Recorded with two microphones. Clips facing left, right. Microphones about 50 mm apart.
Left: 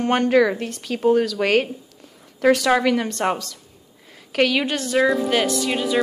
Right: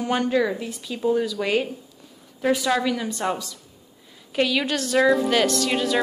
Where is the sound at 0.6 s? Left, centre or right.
Left.